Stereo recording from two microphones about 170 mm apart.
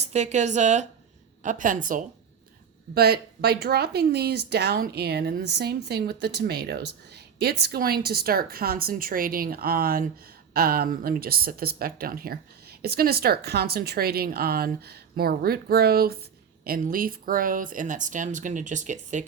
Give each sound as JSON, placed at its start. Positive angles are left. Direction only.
{"t": 0.0, "sound": "speech", "side_deg": -40}
{"t": 2.9, "sound": "a woman's voice", "side_deg": -70}